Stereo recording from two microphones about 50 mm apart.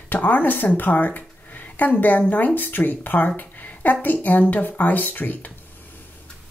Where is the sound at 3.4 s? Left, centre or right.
Left.